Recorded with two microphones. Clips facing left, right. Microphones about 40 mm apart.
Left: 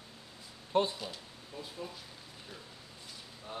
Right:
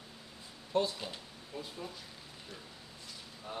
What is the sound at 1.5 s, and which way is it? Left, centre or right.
Speech, centre.